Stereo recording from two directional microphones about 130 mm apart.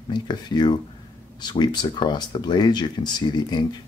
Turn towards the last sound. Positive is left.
turn(degrees=35)  # may be behind; listen again after turning